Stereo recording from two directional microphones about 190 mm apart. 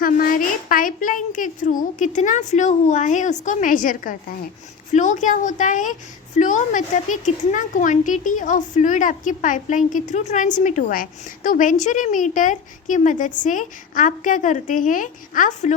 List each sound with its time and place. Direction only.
0.0 s a woman's voice: 45° left (ahead or behind)